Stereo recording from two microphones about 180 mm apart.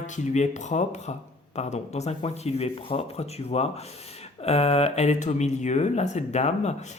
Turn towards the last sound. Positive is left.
turn(degrees=40)  # may be behind; listen again after turning